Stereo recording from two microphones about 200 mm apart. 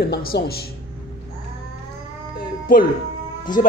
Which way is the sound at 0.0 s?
50° left (ahead or behind).